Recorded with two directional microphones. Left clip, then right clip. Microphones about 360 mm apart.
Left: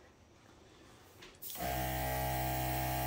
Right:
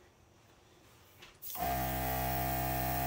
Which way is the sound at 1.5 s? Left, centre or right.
Centre.